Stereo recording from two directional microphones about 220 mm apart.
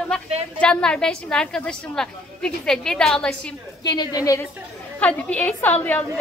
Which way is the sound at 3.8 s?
20° left (ahead or behind).